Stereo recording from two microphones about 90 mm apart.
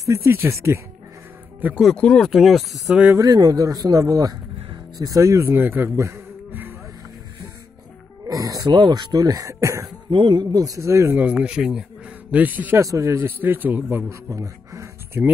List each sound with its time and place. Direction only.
0.0 s a man's voice: 35° right (ahead or behind)
1.6 s a man's voice: 20° right (ahead or behind)
2.0 s speech: 5° left (ahead or behind)
2.9 s speech: 15° right (ahead or behind)
3.2 s speech: 45° right (ahead or behind); by 6.7 s 25° right (ahead or behind)
8.3 s speech: 40° right (ahead or behind)
10.1 s a man's voice: 55° right (ahead or behind); by 11.1 s 30° right (ahead or behind)
11.1 s speech: 10° right (ahead or behind)
12.3 s a man's voice: 20° right (ahead or behind)
12.8 s a man's voice: 35° right (ahead or behind)
13.4 s a man's voice: 20° right (ahead or behind)
14.3 s music: 35° right (ahead or behind)
15.2 s a man's voice: 25° right (ahead or behind)